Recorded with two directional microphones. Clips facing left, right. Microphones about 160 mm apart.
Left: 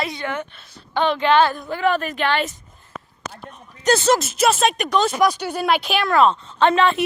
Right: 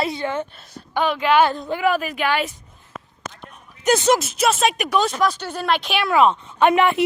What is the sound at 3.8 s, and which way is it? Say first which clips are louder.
Speech: even; 15° right (ahead or behind).